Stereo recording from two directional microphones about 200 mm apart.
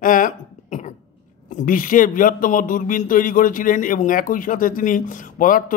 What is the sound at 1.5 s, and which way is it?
Speech, 40° left (ahead or behind).